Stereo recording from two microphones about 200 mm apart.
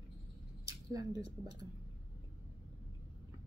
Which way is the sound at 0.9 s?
20° right (ahead or behind).